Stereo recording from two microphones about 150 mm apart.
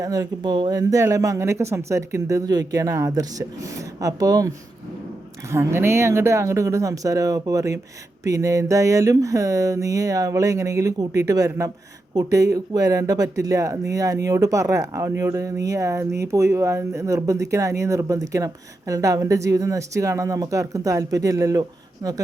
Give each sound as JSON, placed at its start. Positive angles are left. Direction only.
{"t": 0.0, "sound": "speech", "side_deg": -25}